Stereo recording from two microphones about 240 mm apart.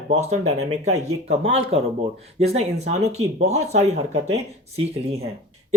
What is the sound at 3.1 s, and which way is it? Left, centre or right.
Speech, right.